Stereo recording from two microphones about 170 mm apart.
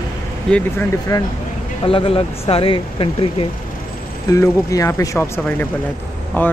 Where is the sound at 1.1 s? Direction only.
20° left (ahead or behind).